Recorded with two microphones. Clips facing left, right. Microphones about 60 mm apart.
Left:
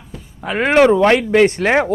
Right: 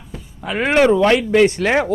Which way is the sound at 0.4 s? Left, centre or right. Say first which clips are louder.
Left 2 dB; left.